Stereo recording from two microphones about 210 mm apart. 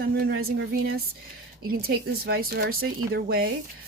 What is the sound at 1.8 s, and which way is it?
Speech, 45° right (ahead or behind).